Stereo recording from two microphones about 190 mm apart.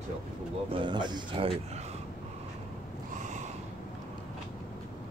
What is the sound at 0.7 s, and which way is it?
Speech, 25° right (ahead or behind).